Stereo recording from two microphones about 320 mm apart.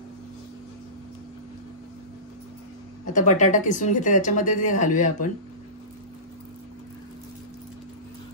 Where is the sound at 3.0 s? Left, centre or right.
Left.